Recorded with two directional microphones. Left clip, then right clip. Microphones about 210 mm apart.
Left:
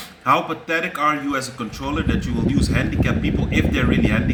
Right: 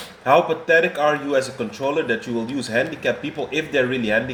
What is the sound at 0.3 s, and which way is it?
A man's voice, 40° left (ahead or behind).